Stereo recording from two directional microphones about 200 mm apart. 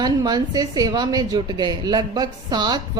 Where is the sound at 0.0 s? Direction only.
20° right (ahead or behind).